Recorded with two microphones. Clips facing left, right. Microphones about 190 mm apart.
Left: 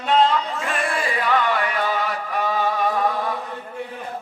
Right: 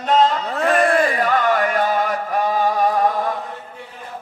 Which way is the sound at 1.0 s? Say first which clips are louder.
Right 3 dB; 45° right (ahead or behind).